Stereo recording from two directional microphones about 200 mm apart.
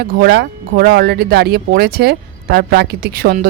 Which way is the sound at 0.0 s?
50° right (ahead or behind).